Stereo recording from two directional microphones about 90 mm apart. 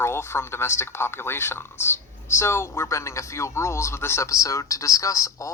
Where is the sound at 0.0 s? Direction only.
25° left (ahead or behind).